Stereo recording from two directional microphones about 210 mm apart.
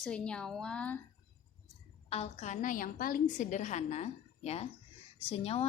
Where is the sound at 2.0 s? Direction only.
30° left (ahead or behind).